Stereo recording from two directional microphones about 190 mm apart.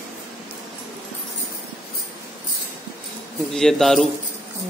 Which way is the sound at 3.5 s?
Centre (ahead or behind).